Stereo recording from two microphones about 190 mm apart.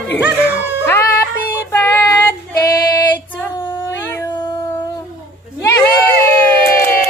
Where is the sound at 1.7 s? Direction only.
10° left (ahead or behind).